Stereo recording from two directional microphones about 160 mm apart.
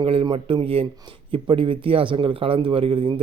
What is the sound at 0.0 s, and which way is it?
Speech, 35° right (ahead or behind).